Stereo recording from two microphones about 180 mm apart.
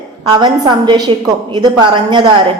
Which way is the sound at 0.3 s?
25° right (ahead or behind).